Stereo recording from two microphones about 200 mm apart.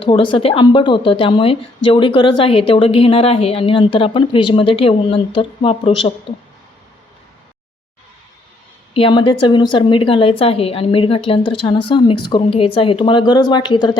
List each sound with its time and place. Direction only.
0.0 s a woman's voice: 25° left (ahead or behind)
8.9 s a woman's voice: 25° left (ahead or behind)